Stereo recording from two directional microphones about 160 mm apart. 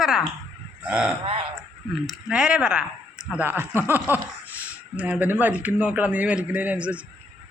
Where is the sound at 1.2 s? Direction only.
35° right (ahead or behind).